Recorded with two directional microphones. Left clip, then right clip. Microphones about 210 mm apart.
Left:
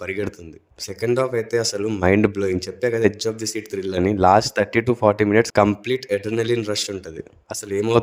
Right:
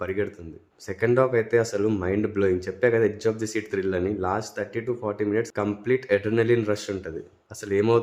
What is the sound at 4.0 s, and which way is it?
Speech, 45° left (ahead or behind).